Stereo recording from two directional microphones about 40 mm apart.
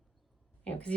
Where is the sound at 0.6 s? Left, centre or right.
Left.